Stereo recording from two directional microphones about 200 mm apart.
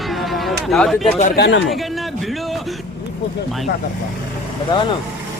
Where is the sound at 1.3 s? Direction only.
60° left (ahead or behind).